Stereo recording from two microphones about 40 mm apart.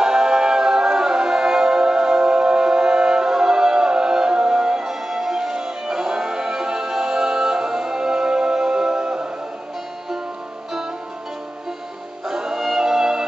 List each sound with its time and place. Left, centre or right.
0.0 s music: centre
12.3 s music: centre